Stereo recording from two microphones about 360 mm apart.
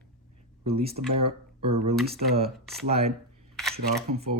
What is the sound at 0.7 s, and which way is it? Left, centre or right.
Speech, centre.